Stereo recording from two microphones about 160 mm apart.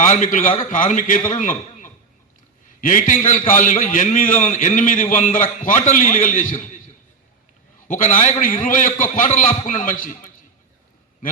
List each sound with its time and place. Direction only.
0.0 s a man's voice: 55° left (ahead or behind)
7.9 s a man's voice: 55° left (ahead or behind)